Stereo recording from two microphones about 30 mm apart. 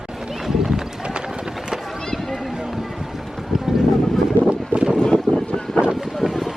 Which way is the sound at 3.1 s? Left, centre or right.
Centre.